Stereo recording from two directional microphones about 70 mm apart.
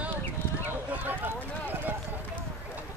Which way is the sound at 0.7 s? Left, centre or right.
Right.